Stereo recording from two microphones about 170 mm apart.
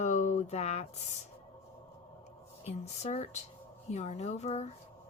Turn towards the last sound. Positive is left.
turn(degrees=40)  # may be behind; listen again after turning